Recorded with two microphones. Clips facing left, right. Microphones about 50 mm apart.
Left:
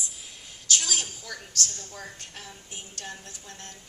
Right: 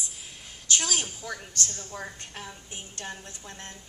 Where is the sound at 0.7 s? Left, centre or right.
Right.